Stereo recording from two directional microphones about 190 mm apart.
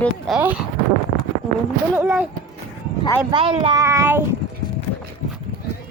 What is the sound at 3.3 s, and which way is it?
Speech, 25° right (ahead or behind).